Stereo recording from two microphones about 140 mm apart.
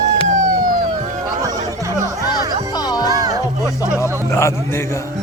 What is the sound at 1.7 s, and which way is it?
Music, 20° right (ahead or behind).